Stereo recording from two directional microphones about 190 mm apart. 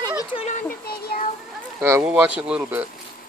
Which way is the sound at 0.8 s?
55° left (ahead or behind).